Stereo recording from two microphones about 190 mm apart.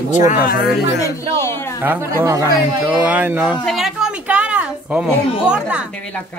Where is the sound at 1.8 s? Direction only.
10° right (ahead or behind).